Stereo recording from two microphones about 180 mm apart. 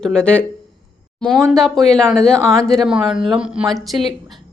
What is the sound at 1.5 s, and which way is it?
Speech, centre (ahead or behind).